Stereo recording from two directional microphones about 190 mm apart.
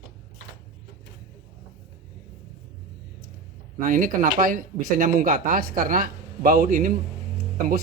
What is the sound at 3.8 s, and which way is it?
Speech, 45° right (ahead or behind).